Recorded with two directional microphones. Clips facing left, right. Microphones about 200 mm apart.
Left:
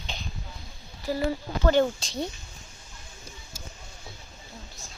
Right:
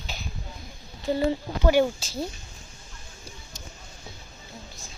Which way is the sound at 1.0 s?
25° right (ahead or behind).